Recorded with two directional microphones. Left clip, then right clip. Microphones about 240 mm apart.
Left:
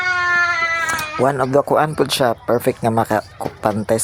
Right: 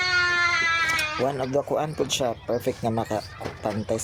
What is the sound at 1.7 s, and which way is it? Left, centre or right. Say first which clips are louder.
Speech: left 9 dB; centre.